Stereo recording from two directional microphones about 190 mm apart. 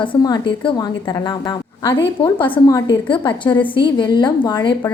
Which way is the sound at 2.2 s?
25° left (ahead or behind).